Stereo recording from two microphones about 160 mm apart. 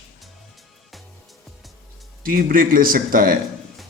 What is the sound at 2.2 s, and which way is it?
A man's voice, 65° right (ahead or behind).